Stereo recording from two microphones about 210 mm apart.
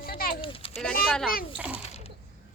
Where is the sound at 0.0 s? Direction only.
45° left (ahead or behind).